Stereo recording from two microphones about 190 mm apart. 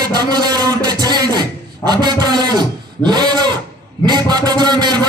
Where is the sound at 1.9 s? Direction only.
20° right (ahead or behind).